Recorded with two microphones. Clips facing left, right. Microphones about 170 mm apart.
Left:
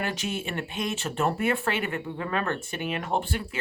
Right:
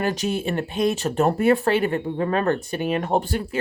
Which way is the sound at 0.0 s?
40° right (ahead or behind).